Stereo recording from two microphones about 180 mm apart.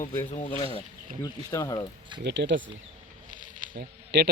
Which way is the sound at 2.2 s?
75° right (ahead or behind).